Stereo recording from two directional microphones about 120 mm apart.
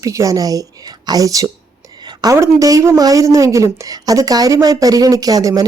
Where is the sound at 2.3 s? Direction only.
25° right (ahead or behind).